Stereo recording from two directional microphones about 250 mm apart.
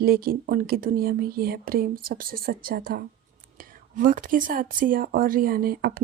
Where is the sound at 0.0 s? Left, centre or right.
Right.